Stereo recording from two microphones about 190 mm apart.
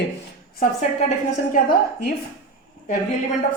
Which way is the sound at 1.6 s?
50° left (ahead or behind).